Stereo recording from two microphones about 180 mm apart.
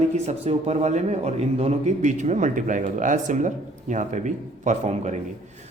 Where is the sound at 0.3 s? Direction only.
35° right (ahead or behind).